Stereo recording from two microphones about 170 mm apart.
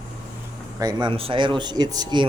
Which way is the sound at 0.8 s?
25° right (ahead or behind).